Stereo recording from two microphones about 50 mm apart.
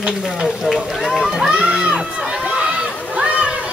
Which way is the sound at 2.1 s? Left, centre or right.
Centre.